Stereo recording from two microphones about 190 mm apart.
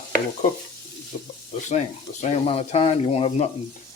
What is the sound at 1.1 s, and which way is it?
Speech, 35° left (ahead or behind).